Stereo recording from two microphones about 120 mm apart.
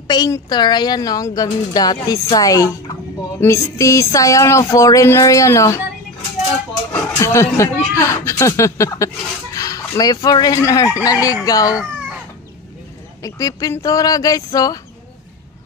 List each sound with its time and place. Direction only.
0.1 s speech: 35° left (ahead or behind)
6.9 s speech: 25° left (ahead or behind)
13.2 s speech: 30° left (ahead or behind)